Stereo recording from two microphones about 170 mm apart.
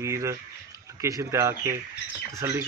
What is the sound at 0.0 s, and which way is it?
Speech, 15° right (ahead or behind).